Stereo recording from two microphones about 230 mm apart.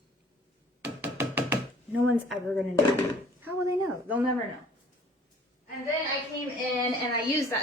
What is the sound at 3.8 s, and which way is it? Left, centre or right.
Speech, centre.